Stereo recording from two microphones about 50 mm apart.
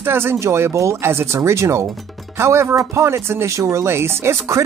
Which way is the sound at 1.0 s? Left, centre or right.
Right.